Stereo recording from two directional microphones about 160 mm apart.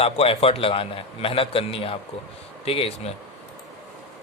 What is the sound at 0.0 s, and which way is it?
Speech, 40° left (ahead or behind).